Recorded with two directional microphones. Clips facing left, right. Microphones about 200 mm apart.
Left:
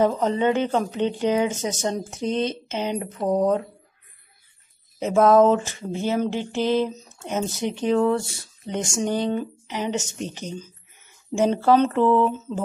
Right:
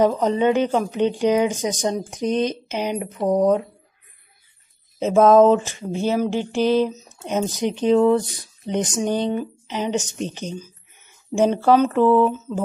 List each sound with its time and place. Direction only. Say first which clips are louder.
0.0 s a woman's voice: right 3 dB; 15° right (ahead or behind)
4.9 s a woman's voice: right 3 dB; 20° right (ahead or behind)
12.3 s mantra: right 2 dB; centre (ahead or behind)